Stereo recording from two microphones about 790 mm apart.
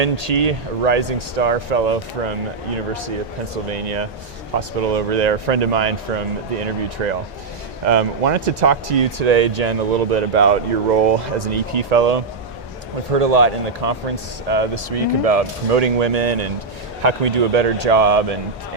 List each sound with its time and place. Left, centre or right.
0.0 s speech: right
3.7 s speech: right